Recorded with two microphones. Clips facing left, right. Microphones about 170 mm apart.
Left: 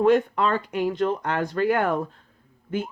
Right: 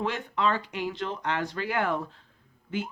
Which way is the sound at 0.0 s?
50° left (ahead or behind).